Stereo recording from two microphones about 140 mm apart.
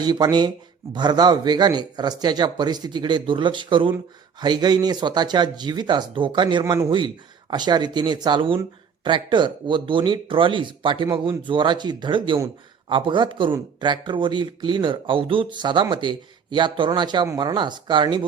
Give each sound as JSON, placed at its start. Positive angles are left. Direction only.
{"t": 0.0, "sound": "speech", "side_deg": -30}